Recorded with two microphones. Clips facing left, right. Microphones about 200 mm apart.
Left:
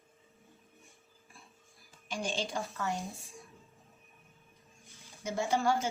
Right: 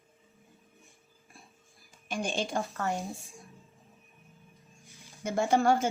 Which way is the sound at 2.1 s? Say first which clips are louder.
Right 3 dB; 50° right (ahead or behind).